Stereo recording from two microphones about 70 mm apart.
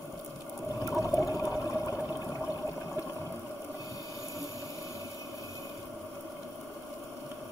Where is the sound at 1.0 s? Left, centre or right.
Left.